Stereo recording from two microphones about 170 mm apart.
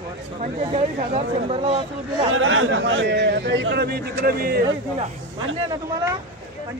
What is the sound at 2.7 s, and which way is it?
Speech, 90° right.